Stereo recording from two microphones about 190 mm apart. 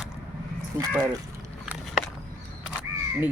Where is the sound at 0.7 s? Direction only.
15° right (ahead or behind).